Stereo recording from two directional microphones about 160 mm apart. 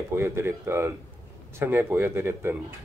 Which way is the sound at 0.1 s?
15° right (ahead or behind).